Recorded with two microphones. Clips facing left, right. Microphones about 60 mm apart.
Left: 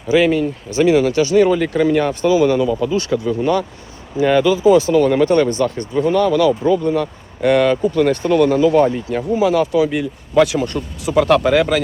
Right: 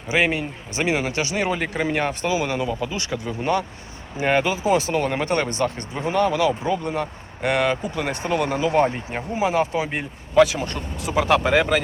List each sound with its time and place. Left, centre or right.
0.1 s speech: right
6.5 s speech: centre
6.8 s speech: centre
8.7 s speech: right
10.3 s speech: centre